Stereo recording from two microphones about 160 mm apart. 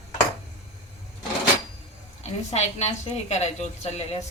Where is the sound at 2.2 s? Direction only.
45° left (ahead or behind).